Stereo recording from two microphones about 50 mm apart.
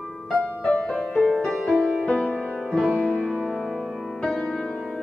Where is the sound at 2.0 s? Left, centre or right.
Left.